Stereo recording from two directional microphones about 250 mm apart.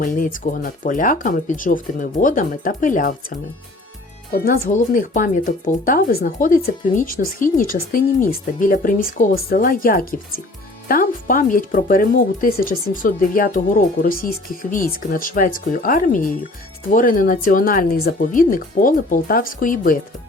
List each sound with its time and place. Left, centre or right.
0.0 s speech: left